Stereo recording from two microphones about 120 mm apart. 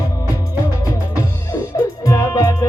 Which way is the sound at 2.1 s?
30° left (ahead or behind).